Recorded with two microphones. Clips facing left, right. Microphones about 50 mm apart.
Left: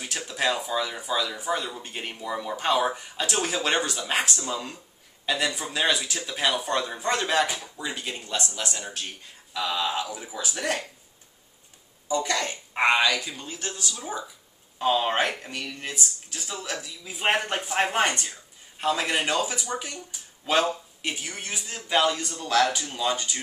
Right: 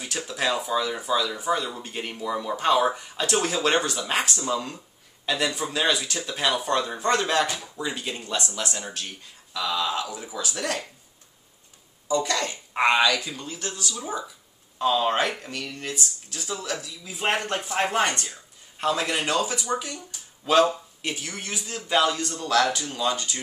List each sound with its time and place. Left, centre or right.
0.3 s speech: centre
9.5 s speech: left
12.1 s speech: left